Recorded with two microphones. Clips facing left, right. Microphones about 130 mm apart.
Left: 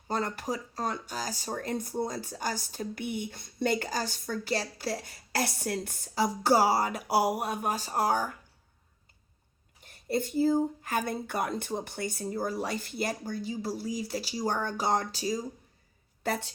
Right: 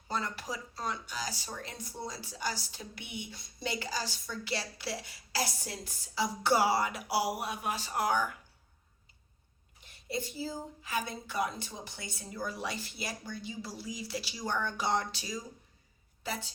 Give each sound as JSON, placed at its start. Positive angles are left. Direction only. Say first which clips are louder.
{"t": 0.1, "sound": "speech", "louder": "left 5 dB", "side_deg": 50}
{"t": 9.8, "sound": "speech", "louder": "left 7 dB", "side_deg": 50}
{"t": 16.2, "sound": "a woman's voice", "louder": "left 7 dB", "side_deg": 55}